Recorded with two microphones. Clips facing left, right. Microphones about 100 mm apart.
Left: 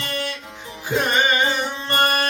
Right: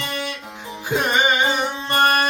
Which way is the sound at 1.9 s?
15° right (ahead or behind).